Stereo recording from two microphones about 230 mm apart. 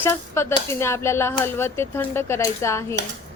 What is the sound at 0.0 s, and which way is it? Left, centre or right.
Speech, centre.